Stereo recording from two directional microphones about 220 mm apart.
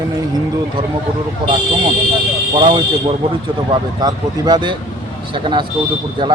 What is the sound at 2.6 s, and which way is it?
Speech, 25° right (ahead or behind).